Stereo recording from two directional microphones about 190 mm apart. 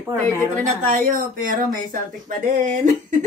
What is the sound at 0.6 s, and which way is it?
A woman's voice, 40° right (ahead or behind).